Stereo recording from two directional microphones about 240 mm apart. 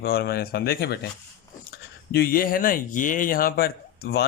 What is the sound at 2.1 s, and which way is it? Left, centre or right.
A man's voice, left.